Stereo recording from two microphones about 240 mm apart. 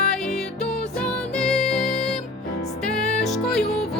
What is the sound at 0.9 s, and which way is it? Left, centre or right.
Music, centre.